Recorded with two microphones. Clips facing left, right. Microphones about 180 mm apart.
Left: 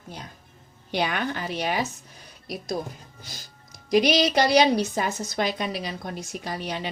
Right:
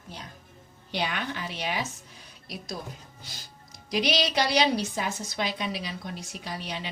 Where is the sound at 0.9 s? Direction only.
50° left (ahead or behind).